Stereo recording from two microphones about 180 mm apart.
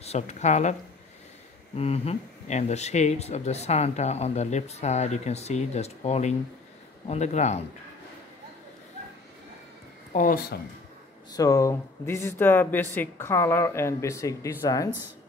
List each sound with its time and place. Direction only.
0.0 s speech: 35° left (ahead or behind)
1.8 s speech: 35° left (ahead or behind)
10.1 s speech: 50° left (ahead or behind)
11.3 s a woman's voice: 20° left (ahead or behind)